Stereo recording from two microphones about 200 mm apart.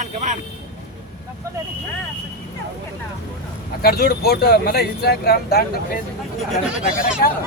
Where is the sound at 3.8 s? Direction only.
50° left (ahead or behind).